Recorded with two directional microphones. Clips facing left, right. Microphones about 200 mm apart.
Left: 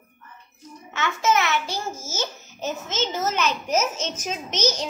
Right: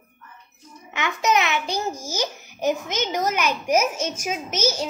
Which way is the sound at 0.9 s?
15° right (ahead or behind).